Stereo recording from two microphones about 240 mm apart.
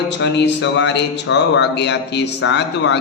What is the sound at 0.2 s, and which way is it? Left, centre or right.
Speech, left.